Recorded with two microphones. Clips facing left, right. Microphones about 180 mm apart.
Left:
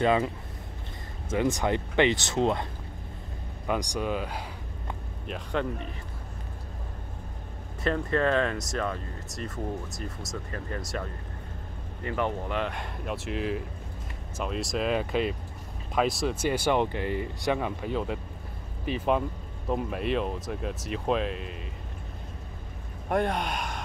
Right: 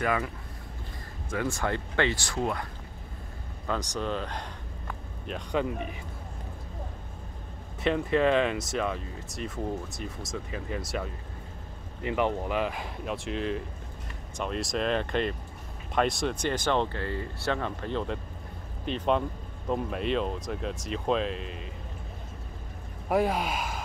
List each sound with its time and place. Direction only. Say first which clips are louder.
0.0 s speech: left 5 dB; 25° left (ahead or behind)
1.3 s speech: left 4 dB; 20° left (ahead or behind)
3.6 s speech: left 2 dB; 15° left (ahead or behind)
7.8 s speech: right 2 dB; 5° right (ahead or behind)
12.0 s speech: right 2 dB; 15° right (ahead or behind)
12.4 s speech: right 1 dB; 5° right (ahead or behind)
23.0 s speech: right 1 dB; 5° right (ahead or behind)